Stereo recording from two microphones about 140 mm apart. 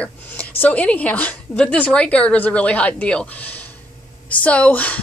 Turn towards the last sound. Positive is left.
turn(degrees=10)  # may be behind; listen again after turning